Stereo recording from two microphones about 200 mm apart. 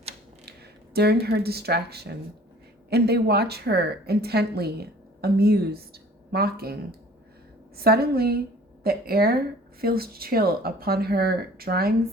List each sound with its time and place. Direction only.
0.4 s a woman's voice: 55° right (ahead or behind)
7.8 s a woman's voice: 50° right (ahead or behind)